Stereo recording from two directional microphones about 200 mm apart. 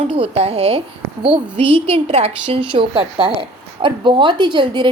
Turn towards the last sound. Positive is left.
turn(degrees=-25)  # may be behind; listen again after turning